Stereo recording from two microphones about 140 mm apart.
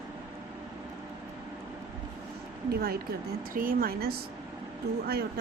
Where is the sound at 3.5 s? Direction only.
80° right.